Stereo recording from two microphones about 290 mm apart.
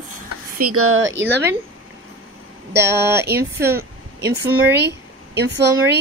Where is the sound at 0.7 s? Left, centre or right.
Right.